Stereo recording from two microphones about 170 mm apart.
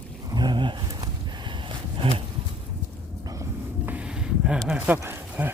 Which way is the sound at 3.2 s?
20° right (ahead or behind).